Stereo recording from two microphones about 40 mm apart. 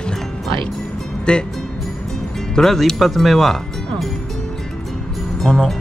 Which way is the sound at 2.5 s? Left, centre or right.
Centre.